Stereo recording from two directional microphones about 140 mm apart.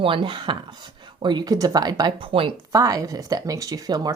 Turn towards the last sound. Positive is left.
turn(degrees=-30)  # may be behind; listen again after turning